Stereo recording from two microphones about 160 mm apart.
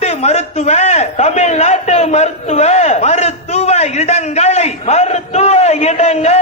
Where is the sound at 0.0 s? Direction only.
40° left (ahead or behind).